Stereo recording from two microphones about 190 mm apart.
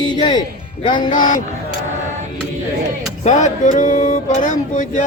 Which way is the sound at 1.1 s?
45° left (ahead or behind).